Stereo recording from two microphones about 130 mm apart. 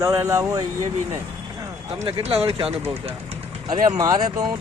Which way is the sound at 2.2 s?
50° right (ahead or behind).